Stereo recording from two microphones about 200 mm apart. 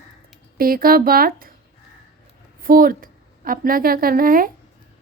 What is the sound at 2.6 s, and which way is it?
A woman's voice, 45° right (ahead or behind).